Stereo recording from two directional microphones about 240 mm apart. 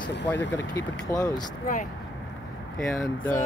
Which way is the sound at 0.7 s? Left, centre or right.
Centre.